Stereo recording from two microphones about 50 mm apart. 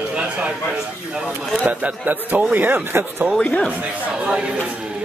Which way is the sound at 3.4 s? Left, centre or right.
Left.